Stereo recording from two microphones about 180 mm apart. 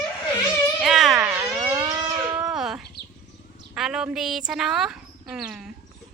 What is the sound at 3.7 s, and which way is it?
Speech, 5° right (ahead or behind).